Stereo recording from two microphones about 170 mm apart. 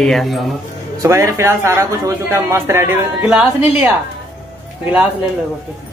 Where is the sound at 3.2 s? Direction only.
5° right (ahead or behind).